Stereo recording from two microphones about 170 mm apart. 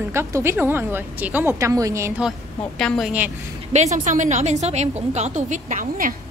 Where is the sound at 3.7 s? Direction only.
45° right (ahead or behind).